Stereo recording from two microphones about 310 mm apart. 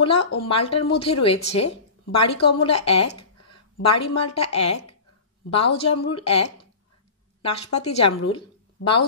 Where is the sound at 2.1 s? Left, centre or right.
Left.